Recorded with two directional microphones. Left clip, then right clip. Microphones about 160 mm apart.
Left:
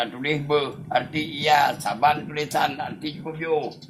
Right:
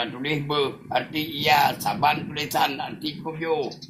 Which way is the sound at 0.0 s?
20° left (ahead or behind).